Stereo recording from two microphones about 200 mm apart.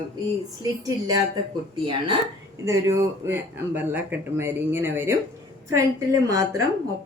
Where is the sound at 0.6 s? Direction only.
20° right (ahead or behind).